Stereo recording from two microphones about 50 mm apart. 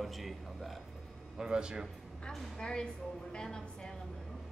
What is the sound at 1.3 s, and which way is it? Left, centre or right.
Speech, centre.